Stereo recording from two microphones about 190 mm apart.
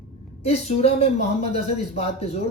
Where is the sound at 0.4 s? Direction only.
35° left (ahead or behind).